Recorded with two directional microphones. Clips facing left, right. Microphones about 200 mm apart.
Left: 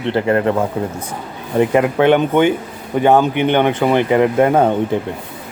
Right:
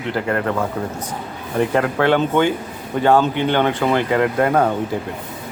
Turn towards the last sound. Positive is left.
turn(degrees=25)  # may be behind; listen again after turning